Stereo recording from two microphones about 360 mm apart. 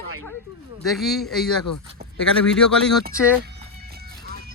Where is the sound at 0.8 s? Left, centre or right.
Centre.